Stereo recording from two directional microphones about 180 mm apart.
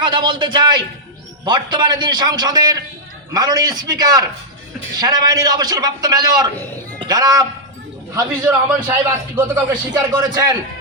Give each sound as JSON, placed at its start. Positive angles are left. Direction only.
{"t": 0.0, "sound": "a man's voice", "side_deg": -25}
{"t": 8.7, "sound": "a man's voice", "side_deg": -10}